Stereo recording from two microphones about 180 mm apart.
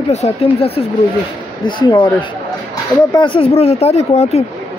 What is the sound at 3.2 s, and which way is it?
Speech, 30° left (ahead or behind).